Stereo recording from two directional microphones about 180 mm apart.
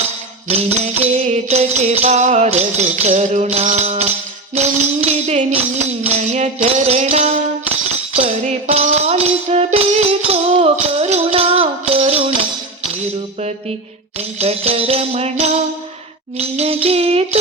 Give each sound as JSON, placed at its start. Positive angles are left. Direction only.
{"t": 0.4, "sound": "music", "side_deg": -35}